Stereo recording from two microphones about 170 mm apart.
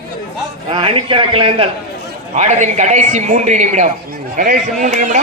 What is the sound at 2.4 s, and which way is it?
A man's voice, 45° right (ahead or behind).